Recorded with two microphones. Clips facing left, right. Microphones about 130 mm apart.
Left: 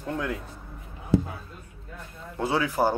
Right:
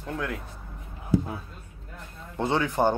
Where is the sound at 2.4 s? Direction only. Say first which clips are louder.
Even; 5° left (ahead or behind).